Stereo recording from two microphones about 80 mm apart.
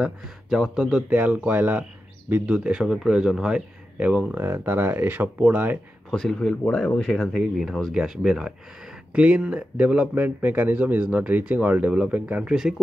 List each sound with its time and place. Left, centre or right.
0.0 s speech: centre
1.1 s speech: right
2.4 s speech: centre
6.0 s speech: centre
7.2 s speech: centre